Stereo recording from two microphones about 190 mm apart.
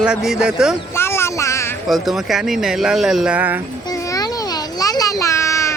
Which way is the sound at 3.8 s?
20° left (ahead or behind).